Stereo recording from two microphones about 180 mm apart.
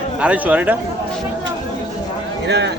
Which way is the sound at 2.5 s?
70° right (ahead or behind).